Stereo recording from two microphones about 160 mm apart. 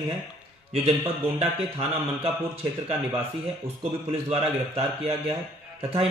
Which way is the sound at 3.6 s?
35° right (ahead or behind).